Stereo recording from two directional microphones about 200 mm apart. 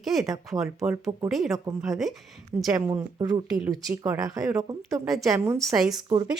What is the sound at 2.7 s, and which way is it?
Speech, 15° right (ahead or behind).